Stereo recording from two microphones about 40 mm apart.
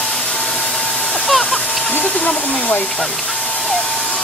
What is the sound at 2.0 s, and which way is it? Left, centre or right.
Speech, left.